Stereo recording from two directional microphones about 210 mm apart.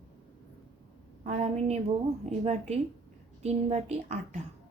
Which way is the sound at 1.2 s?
30° right (ahead or behind).